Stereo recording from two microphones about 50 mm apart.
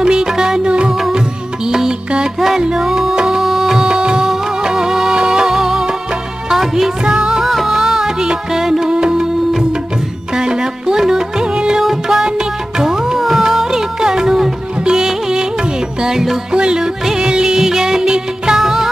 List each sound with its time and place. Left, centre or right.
0.0 s music: centre
7.4 s music: centre
10.3 s music: centre